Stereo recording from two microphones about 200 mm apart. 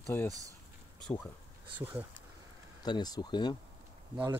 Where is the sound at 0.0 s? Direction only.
10° left (ahead or behind).